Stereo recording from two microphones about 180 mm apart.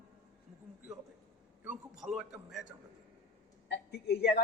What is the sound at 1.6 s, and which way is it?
A man's voice, 5° right (ahead or behind).